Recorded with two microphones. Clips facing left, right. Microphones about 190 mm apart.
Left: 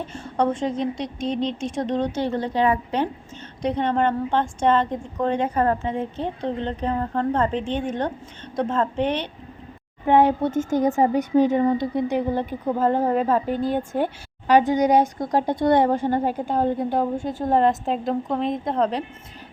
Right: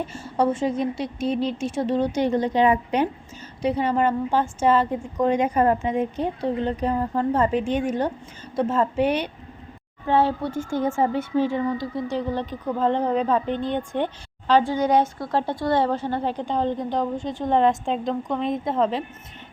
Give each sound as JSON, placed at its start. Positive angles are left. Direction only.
{"t": 0.1, "sound": "speech", "side_deg": -5}
{"t": 3.6, "sound": "speech", "side_deg": -5}
{"t": 10.1, "sound": "a woman's voice", "side_deg": 15}